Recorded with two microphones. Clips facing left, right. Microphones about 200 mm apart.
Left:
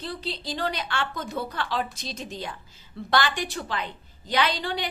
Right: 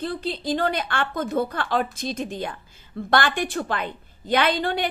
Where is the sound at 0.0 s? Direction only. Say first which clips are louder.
Right 6 dB; 50° right (ahead or behind).